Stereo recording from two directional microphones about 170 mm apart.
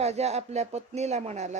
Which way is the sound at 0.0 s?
40° right (ahead or behind).